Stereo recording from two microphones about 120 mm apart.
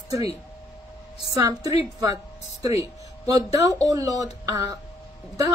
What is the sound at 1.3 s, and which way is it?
Speech, 30° right (ahead or behind).